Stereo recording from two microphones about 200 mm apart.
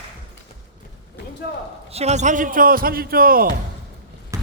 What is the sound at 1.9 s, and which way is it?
Speech, 35° right (ahead or behind).